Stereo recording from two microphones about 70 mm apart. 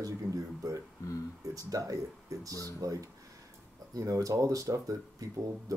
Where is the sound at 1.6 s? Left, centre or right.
Right.